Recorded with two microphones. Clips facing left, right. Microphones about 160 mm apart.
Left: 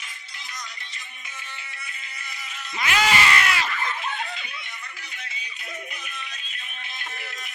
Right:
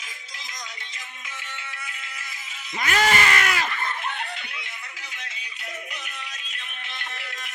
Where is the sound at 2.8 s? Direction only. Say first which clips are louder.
Even; 45° right (ahead or behind).